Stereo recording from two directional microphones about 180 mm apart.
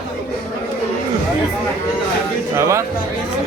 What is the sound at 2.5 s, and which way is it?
Speech, 15° right (ahead or behind).